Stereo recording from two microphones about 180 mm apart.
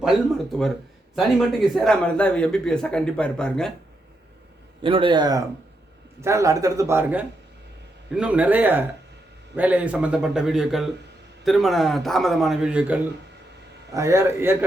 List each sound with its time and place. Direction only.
0.0 s speech: centre (ahead or behind)
4.8 s a man's voice: 30° right (ahead or behind); by 13.0 s 5° right (ahead or behind)
13.9 s a man's voice: 15° right (ahead or behind)